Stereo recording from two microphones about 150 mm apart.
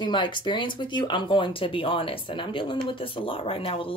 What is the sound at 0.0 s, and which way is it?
Speech, 30° left (ahead or behind).